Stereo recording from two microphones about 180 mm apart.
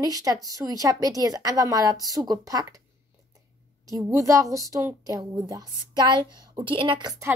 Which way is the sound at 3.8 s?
20° right (ahead or behind).